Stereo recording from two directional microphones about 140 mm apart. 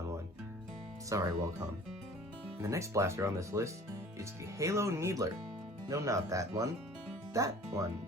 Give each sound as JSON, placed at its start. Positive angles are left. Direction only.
{"t": 1.1, "sound": "speech", "side_deg": -25}
{"t": 2.6, "sound": "speech", "side_deg": -20}